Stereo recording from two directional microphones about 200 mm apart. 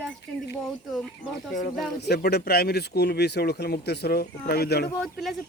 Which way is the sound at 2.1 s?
50° left (ahead or behind).